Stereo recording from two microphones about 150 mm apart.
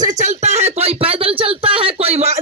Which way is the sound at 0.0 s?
55° right (ahead or behind).